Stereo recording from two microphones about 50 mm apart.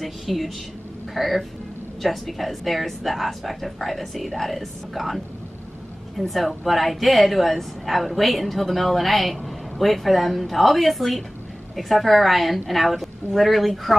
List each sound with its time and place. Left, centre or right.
0.0 s a woman's voice: centre